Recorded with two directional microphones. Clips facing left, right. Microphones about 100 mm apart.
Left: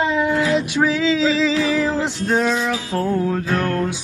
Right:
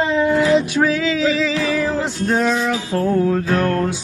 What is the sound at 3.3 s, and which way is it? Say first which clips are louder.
Music: right 3 dB; centre (ahead or behind).